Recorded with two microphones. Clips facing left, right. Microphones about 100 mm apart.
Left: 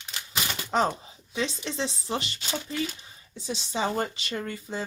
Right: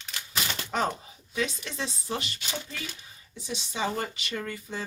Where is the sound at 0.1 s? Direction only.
20° left (ahead or behind).